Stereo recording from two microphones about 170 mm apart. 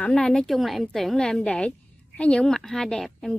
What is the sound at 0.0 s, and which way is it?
A woman's voice, 5° left (ahead or behind).